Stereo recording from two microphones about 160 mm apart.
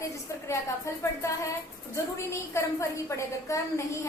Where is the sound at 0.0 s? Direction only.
20° left (ahead or behind).